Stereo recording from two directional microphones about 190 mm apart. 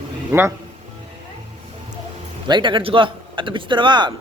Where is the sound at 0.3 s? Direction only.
15° right (ahead or behind).